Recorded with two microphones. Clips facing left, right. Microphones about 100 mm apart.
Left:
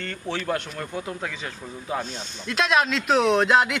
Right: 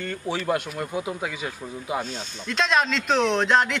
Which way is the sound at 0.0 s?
10° right (ahead or behind).